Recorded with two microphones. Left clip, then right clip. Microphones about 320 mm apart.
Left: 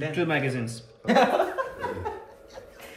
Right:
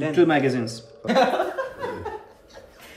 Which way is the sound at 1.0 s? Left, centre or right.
Centre.